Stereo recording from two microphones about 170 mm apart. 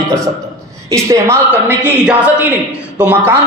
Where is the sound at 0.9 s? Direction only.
15° right (ahead or behind).